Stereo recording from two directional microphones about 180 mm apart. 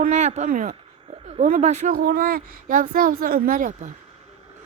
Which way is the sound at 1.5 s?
40° right (ahead or behind).